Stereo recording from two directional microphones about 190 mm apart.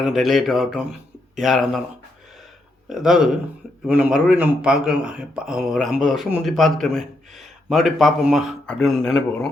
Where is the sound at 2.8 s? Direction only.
Centre (ahead or behind).